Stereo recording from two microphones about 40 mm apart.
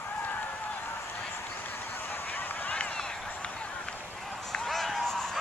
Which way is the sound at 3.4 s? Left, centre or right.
Left.